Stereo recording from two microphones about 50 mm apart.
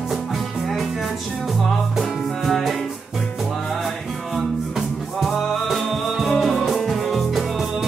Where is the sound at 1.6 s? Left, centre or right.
Centre.